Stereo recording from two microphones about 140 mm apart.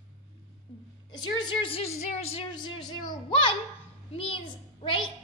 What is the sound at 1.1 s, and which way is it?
A woman's voice, 30° left (ahead or behind).